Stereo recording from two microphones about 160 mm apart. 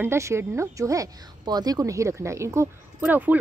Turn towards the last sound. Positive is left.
turn(degrees=-10)  # may be behind; listen again after turning